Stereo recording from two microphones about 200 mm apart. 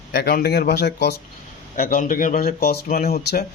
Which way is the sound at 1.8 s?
45° left (ahead or behind).